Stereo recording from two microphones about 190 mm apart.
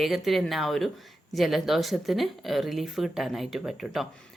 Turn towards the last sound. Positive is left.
turn(degrees=0)  # may be behind; listen again after turning